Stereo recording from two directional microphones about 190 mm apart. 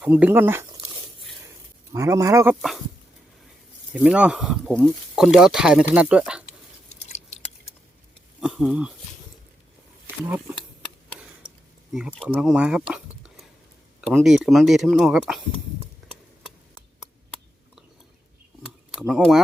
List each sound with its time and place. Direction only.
0.0 s speech: 10° right (ahead or behind)
1.9 s speech: 15° right (ahead or behind)
2.6 s speech: centre (ahead or behind)
3.9 s speech: 5° right (ahead or behind)
8.4 s speech: 5° right (ahead or behind)
10.2 s speech: 10° right (ahead or behind)
12.3 s a sound: 5° right (ahead or behind)
14.0 s speech: centre (ahead or behind)
16.0 s a sound: centre (ahead or behind)
18.6 s a sound: centre (ahead or behind)